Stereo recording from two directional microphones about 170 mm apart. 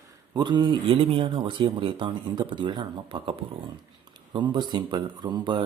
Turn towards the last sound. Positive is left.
turn(degrees=-25)  # may be behind; listen again after turning